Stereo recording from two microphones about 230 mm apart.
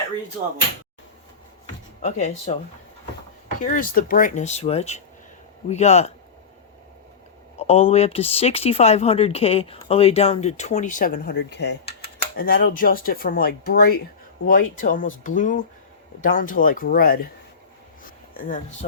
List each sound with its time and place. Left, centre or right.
2.0 s speech: left
3.6 s speech: left
7.6 s speech: left
11.9 s computer keyboard: left
12.4 s speech: left
18.0 s a sound: left